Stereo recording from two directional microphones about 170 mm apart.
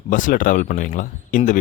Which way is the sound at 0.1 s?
50° left (ahead or behind).